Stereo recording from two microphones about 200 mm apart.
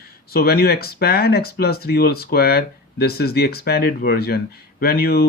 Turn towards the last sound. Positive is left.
turn(degrees=50)  # may be behind; listen again after turning